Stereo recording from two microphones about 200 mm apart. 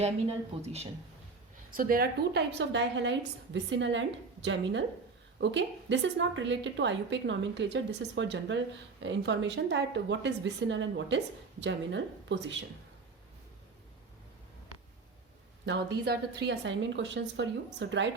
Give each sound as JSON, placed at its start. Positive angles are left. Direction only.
{"t": 0.0, "sound": "speech", "side_deg": -30}
{"t": 1.7, "sound": "a woman's voice", "side_deg": -45}
{"t": 16.0, "sound": "a woman's voice", "side_deg": -55}